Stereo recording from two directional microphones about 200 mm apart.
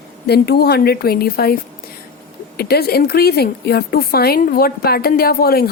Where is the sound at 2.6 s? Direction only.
50° left (ahead or behind).